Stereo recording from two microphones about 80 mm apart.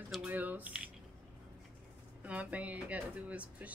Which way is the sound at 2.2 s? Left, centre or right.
Centre.